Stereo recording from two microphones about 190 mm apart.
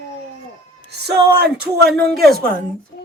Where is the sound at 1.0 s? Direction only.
60° right (ahead or behind).